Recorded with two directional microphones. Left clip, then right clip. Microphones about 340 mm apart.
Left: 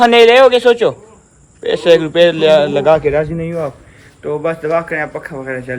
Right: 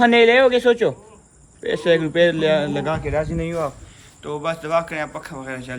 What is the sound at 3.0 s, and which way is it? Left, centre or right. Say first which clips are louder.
Speech: left 8 dB; centre.